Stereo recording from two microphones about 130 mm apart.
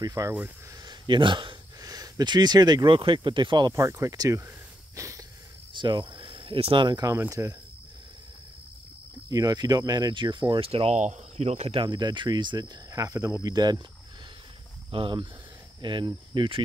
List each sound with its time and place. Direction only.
0.0 s speech: 25° right (ahead or behind)
0.8 s a sound: 40° right (ahead or behind)
1.8 s speech: 30° right (ahead or behind)
3.7 s speech: 25° right (ahead or behind)
4.9 s a sound: 25° right (ahead or behind)
5.7 s speech: 40° right (ahead or behind)
7.2 s speech: 20° right (ahead or behind)
9.3 s speech: 30° right (ahead or behind); by 11.0 s 50° right (ahead or behind)
11.0 s speech: 60° right (ahead or behind)
11.8 s speech: 35° right (ahead or behind)
14.9 s speech: 40° right (ahead or behind)